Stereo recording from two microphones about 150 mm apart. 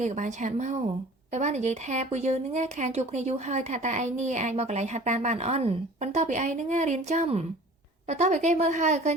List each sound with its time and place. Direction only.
0.0 s speech: 55° right (ahead or behind)